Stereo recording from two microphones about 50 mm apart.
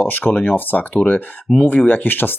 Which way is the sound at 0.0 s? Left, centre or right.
Left.